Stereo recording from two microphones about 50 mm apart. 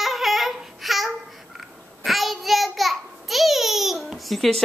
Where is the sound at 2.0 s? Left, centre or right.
Centre.